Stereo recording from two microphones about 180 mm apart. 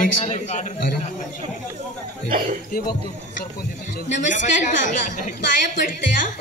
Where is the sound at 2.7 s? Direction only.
50° left (ahead or behind).